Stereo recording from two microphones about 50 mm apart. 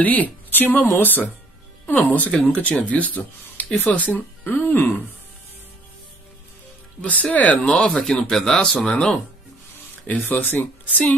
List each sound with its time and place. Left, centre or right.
0.0 s speech: left
7.0 s speech: left
8.0 s speech: centre
10.2 s speech: left